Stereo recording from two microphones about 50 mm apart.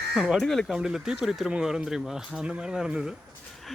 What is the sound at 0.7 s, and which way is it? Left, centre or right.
Speech, centre.